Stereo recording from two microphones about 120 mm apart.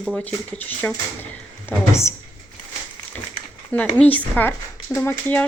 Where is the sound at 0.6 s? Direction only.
10° left (ahead or behind).